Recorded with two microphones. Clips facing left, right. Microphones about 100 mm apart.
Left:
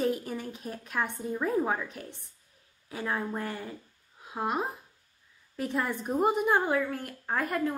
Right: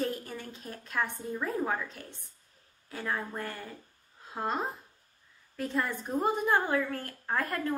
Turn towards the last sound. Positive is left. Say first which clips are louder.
# left 2 dB
turn(degrees=10)  # may be behind; listen again after turning